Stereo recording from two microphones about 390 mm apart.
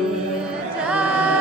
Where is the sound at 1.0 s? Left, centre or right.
Centre.